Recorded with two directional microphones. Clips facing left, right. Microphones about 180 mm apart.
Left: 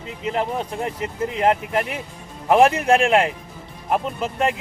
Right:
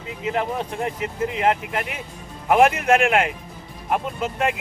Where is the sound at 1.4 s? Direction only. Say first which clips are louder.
Left 3 dB; 35° left (ahead or behind).